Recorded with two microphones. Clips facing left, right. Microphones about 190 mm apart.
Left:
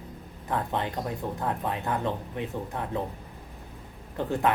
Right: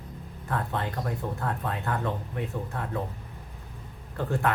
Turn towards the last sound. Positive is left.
turn(degrees=20)  # may be behind; listen again after turning